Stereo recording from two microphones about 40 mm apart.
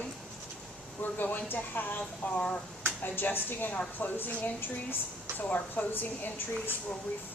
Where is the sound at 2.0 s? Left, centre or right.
Left.